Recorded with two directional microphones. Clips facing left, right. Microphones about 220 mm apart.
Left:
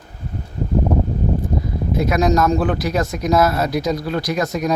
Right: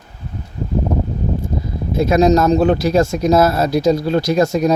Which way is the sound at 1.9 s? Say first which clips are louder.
Right 5 dB; 25° right (ahead or behind).